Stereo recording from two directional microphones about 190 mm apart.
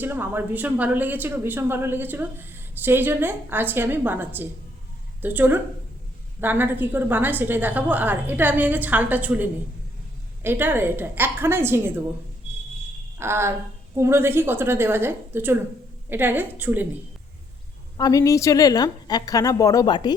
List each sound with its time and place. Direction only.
0.0 s a woman's voice: 10° right (ahead or behind)
13.1 s a woman's voice: 15° right (ahead or behind)
17.9 s a woman's voice: 20° left (ahead or behind)